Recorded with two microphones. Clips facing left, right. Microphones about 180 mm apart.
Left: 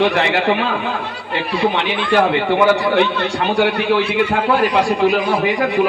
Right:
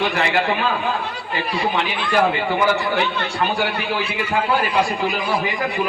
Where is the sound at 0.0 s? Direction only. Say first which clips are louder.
Left 5 dB; 65° left (ahead or behind).